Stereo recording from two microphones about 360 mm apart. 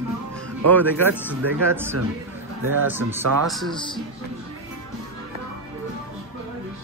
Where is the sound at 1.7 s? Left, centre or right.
Centre.